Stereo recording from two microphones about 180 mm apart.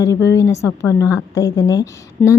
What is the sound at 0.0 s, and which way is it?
A woman's voice, 15° left (ahead or behind).